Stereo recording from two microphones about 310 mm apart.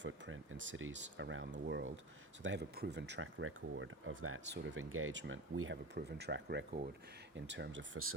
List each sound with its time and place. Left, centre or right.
0.0 s speech: right